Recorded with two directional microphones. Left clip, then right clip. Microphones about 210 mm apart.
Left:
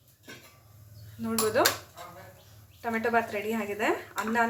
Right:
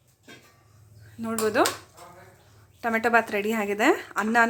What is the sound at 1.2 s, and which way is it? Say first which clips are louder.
Speech: right 3 dB; 30° right (ahead or behind).